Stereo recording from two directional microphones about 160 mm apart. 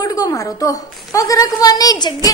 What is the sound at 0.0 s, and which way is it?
A woman's voice, 20° left (ahead or behind).